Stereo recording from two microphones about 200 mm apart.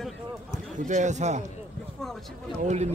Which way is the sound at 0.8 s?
35° right (ahead or behind).